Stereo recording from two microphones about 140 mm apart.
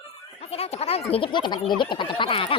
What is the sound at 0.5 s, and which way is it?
Speech, 45° left (ahead or behind).